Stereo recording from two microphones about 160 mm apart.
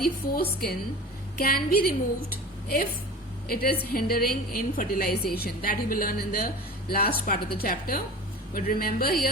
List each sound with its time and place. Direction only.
0.0 s a woman's voice: 70° left (ahead or behind)
3.5 s a woman's voice: 70° left (ahead or behind)